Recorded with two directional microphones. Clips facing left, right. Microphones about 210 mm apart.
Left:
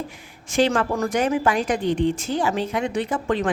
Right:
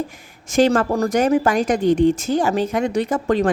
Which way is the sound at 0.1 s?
45° right (ahead or behind).